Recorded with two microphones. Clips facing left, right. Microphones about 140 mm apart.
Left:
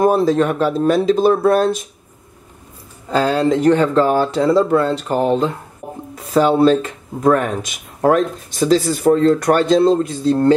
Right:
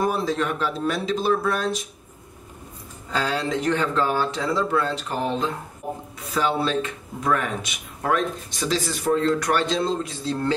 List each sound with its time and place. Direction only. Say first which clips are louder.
0.0 s speech: left 9 dB; 50° left (ahead or behind)
3.1 s speech: left 9 dB; 50° left (ahead or behind)